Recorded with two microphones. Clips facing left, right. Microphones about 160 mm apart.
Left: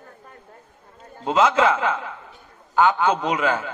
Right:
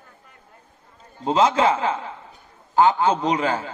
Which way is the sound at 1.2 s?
30° right (ahead or behind).